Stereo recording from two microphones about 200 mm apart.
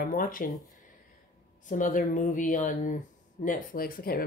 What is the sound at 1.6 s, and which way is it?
Speech, 40° left (ahead or behind).